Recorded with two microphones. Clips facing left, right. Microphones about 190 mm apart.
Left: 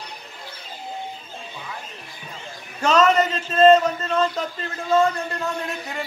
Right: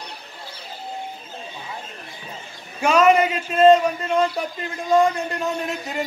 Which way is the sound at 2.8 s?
10° right (ahead or behind).